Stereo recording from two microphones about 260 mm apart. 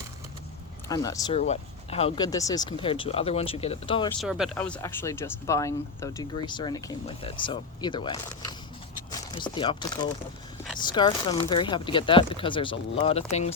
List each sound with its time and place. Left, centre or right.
0.9 s speech: centre
1.4 s speech: left
4.2 s speech: centre; by 13.5 s left